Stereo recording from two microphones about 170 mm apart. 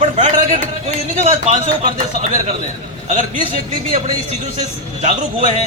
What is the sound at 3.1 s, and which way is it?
Speech, 45° right (ahead or behind).